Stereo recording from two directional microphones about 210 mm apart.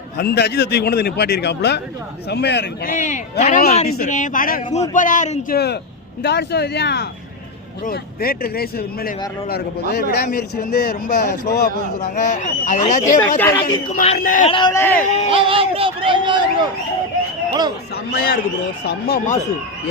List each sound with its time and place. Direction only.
0.2 s speech: 50° left (ahead or behind)
2.9 s speech: 35° left (ahead or behind)
6.2 s speech: 50° left (ahead or behind)
11.9 s speech: 35° left (ahead or behind)
13.4 s speech: 10° left (ahead or behind)
13.9 s speech: 35° left (ahead or behind)
14.5 s speech: 20° left (ahead or behind)
15.3 s speech: 25° right (ahead or behind)
18.9 s speech: 45° left (ahead or behind)